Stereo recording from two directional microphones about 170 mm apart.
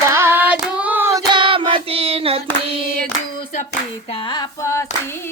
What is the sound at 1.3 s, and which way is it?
Child singing, 30° right (ahead or behind).